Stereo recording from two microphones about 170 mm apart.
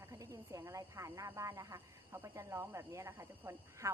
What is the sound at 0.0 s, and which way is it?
Speech, 20° right (ahead or behind).